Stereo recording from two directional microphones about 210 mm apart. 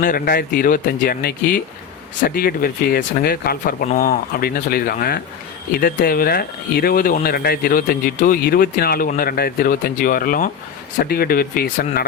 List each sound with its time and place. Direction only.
0.0 s speech: 45° left (ahead or behind)